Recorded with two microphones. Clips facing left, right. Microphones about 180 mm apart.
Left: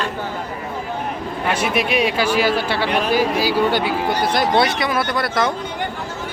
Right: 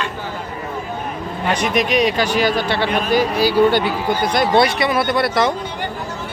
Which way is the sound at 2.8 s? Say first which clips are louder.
Even; 80° left.